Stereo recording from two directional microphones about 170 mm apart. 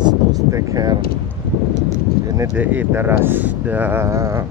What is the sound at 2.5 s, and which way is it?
Speech, 10° right (ahead or behind).